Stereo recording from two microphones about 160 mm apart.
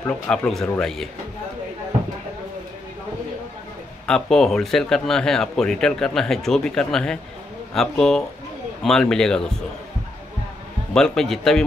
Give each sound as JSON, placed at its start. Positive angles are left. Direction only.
{"t": 0.0, "sound": "a man's voice", "side_deg": 5}
{"t": 4.0, "sound": "a man's voice", "side_deg": 5}
{"t": 10.9, "sound": "a man's voice", "side_deg": 5}